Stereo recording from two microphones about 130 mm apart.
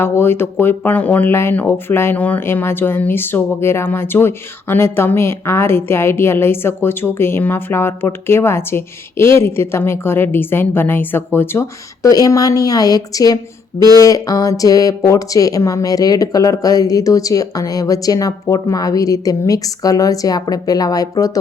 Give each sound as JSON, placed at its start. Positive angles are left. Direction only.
{"t": 0.0, "sound": "speech", "side_deg": 15}
{"t": 12.0, "sound": "speech", "side_deg": 25}